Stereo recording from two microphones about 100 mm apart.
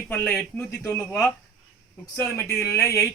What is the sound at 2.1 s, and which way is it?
Speech, 25° left (ahead or behind).